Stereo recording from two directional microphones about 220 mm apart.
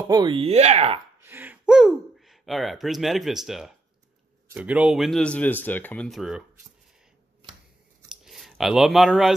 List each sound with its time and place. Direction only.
0.1 s speech: 20° right (ahead or behind)
1.2 s speech: 10° right (ahead or behind)
8.1 s a sound: centre (ahead or behind)